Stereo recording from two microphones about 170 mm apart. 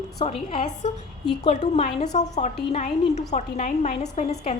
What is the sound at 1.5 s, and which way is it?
A woman's voice, 40° left (ahead or behind).